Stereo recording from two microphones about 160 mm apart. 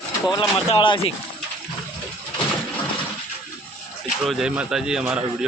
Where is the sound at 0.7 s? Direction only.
35° left (ahead or behind).